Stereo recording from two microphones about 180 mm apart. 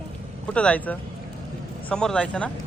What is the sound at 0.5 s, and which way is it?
A man's voice, 5° left (ahead or behind).